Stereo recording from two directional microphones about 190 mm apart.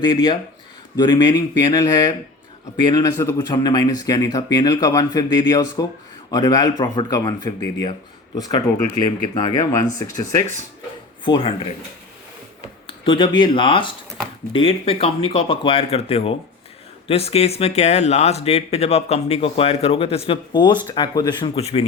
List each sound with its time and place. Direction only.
0.0 s speech: 25° left (ahead or behind)
11.3 s speech: 25° left (ahead or behind)
12.9 s speech: 25° left (ahead or behind)